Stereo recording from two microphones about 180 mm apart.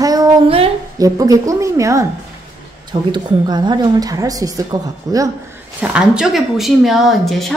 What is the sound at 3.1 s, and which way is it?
A woman's voice, 25° right (ahead or behind).